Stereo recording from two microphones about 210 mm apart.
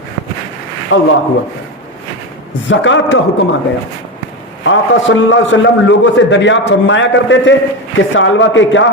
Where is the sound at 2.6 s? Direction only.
60° left (ahead or behind).